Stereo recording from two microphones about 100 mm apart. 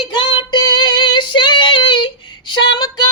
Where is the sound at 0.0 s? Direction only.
50° left (ahead or behind).